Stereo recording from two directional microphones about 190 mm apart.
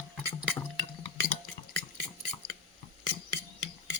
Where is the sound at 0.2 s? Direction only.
10° left (ahead or behind).